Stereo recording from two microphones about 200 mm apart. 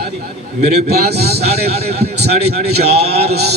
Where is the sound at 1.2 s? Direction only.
55° right (ahead or behind).